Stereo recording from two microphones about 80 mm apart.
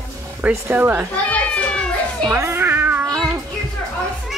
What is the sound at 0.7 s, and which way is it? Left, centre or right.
Speech, right.